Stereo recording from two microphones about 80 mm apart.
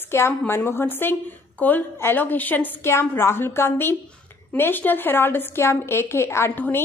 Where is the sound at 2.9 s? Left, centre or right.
Left.